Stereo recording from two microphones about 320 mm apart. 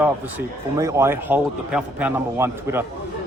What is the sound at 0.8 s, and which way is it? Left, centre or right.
A man's voice, centre.